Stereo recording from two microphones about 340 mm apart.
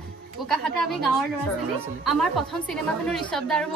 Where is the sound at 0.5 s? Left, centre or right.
Centre.